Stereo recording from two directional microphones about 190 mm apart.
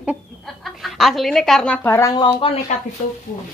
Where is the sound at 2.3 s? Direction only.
35° left (ahead or behind).